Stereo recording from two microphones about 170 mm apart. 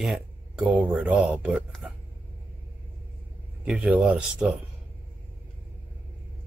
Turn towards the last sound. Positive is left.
turn(degrees=-5)  # may be behind; listen again after turning